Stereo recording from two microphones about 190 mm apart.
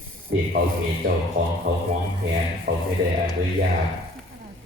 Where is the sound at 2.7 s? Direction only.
50° right (ahead or behind).